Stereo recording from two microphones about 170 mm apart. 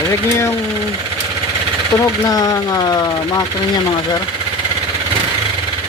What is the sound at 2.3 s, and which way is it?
Siren, 20° left (ahead or behind).